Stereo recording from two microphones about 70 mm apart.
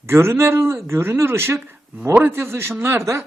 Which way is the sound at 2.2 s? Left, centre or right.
Right.